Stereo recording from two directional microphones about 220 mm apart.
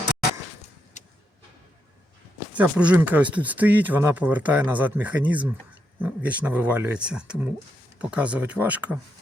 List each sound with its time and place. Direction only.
0.9 s vehicle: 35° left (ahead or behind)
2.5 s speech: 5° right (ahead or behind)